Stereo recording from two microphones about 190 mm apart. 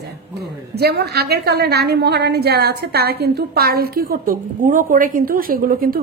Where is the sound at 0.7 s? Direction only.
60° right (ahead or behind).